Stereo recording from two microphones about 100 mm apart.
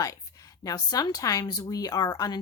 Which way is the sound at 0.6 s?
40° left (ahead or behind).